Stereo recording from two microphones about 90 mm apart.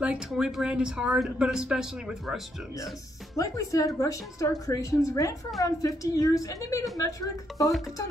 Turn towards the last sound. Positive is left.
turn(degrees=40)  # may be behind; listen again after turning